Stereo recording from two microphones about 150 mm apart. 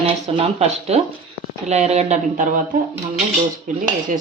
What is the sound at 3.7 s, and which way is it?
Cutlery, 60° right (ahead or behind).